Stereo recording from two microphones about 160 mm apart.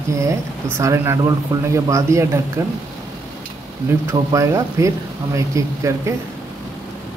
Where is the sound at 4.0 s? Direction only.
20° right (ahead or behind).